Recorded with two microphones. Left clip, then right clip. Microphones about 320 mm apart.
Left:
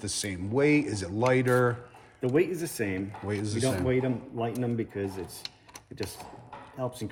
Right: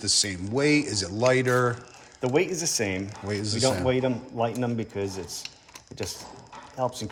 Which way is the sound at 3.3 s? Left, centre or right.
Centre.